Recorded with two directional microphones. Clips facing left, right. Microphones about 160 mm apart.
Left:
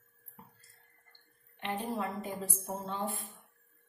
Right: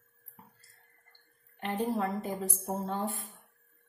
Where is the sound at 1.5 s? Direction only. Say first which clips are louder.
Right 4 dB; 40° right (ahead or behind).